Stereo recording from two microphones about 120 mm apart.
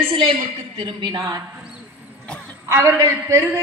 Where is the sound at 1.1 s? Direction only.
30° right (ahead or behind).